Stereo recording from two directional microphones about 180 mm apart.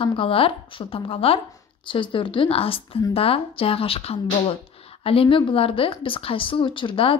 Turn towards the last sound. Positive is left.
turn(degrees=30)  # may be behind; listen again after turning